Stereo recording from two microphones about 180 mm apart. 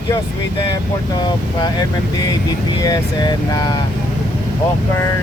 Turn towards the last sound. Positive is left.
turn(degrees=20)  # may be behind; listen again after turning